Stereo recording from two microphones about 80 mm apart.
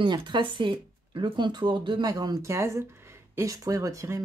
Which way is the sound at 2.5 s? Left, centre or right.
Right.